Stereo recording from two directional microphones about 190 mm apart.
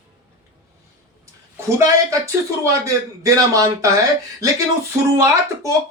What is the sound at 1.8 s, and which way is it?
A man's voice, 15° right (ahead or behind).